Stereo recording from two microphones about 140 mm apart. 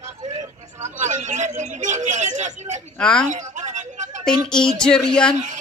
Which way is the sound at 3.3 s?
60° right (ahead or behind).